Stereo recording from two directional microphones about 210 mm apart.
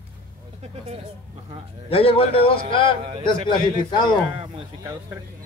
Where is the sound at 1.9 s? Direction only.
25° left (ahead or behind).